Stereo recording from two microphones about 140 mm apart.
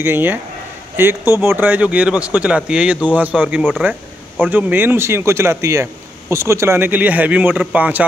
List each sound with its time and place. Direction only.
0.0 s speech: 15° right (ahead or behind)